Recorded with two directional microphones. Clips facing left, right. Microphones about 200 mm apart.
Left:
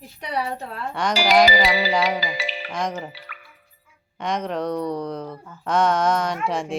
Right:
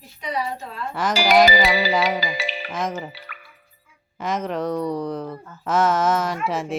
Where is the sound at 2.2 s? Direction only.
55° right (ahead or behind).